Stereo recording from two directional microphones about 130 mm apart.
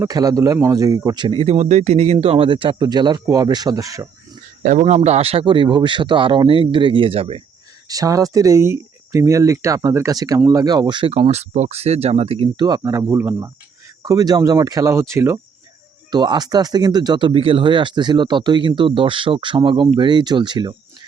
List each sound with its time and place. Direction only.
0.0 s speech: 30° right (ahead or behind); by 1.5 s 45° right (ahead or behind)
1.5 s speech: 60° right (ahead or behind)
2.2 s speech: 45° right (ahead or behind); by 4.1 s 25° right (ahead or behind)
4.6 s speech: 75° right (ahead or behind)
5.0 s speech: 55° right (ahead or behind)
7.9 s speech: 25° right (ahead or behind)
11.1 s speech: 55° right (ahead or behind)
12.6 s speech: 30° right (ahead or behind)
13.1 s speech: 15° right (ahead or behind)
14.0 s speech: 30° right (ahead or behind)
16.1 s speech: 35° right (ahead or behind)